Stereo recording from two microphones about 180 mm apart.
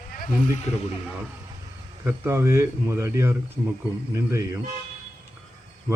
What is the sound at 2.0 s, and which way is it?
Speech, 15° right (ahead or behind).